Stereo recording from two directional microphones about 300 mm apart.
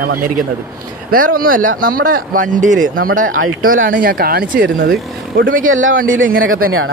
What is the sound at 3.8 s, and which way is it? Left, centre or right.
Speech, right.